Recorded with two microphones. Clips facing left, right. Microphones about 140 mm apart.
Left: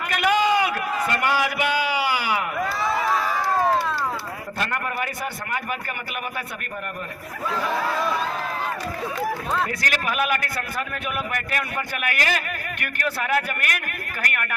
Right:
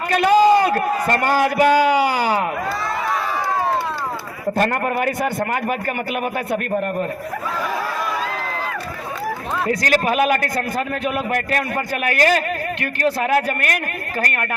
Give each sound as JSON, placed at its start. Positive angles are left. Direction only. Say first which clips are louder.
{"t": 0.1, "sound": "a man's voice", "louder": "right 7 dB", "side_deg": -35}
{"t": 4.5, "sound": "a man's voice", "louder": "right 8 dB", "side_deg": -45}
{"t": 9.6, "sound": "a man's voice", "louder": "right 8 dB", "side_deg": -35}